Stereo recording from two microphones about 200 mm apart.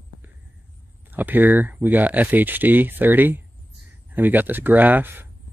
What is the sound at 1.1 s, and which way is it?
Speech, 10° right (ahead or behind).